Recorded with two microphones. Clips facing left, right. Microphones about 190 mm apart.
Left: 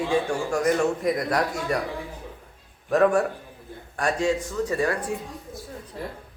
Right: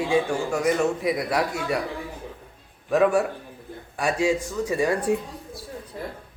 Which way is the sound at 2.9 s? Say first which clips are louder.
Even; 5° right (ahead or behind).